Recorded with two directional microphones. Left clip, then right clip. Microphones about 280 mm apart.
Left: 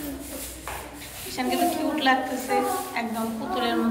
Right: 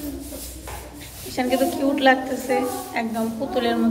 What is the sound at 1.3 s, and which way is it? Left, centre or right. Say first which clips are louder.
A woman's voice: right 3 dB; centre.